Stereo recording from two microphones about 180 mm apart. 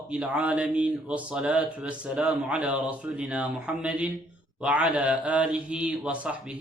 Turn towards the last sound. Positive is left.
turn(degrees=-5)  # may be behind; listen again after turning